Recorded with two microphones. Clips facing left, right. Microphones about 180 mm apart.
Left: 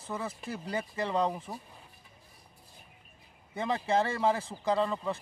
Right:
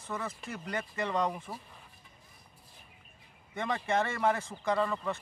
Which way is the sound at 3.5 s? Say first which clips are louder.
Left 2 dB; 30° left (ahead or behind).